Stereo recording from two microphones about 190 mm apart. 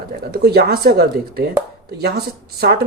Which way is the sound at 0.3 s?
55° right (ahead or behind).